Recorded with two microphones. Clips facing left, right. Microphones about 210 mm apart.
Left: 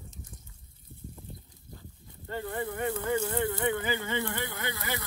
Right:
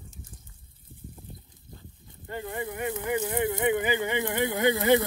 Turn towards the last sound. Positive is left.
turn(degrees=-15)  # may be behind; listen again after turning